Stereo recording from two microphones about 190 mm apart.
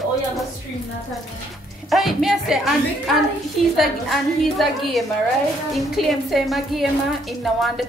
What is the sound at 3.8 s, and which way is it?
A woman's voice, centre (ahead or behind).